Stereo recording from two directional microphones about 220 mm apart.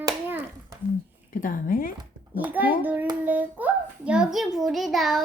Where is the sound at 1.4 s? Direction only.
40° left (ahead or behind).